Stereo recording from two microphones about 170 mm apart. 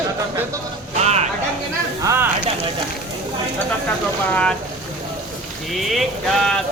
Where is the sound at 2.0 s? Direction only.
15° right (ahead or behind).